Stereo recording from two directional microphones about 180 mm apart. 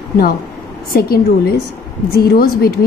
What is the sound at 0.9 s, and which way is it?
A woman's voice, 55° left (ahead or behind).